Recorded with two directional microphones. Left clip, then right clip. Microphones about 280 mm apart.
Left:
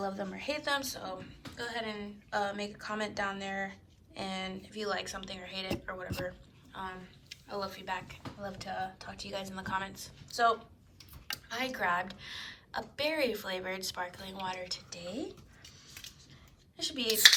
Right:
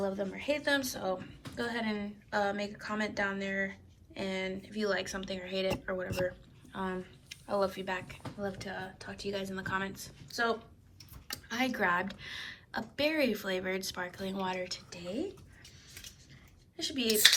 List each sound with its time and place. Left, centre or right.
0.0 s a woman's voice: left
16.7 s speech: centre